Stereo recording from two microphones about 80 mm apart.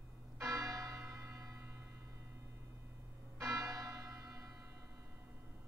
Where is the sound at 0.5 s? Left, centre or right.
Right.